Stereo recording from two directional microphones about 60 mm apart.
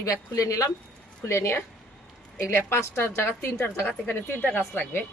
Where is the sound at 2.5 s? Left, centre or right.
Left.